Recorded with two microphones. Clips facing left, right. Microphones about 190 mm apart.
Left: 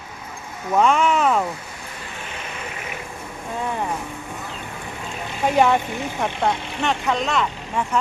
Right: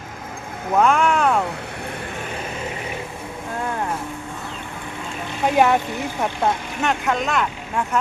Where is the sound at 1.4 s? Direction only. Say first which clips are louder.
Right 2 dB; 65° right (ahead or behind).